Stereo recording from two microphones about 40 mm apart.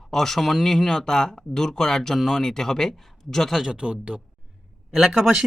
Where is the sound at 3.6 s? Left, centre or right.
Right.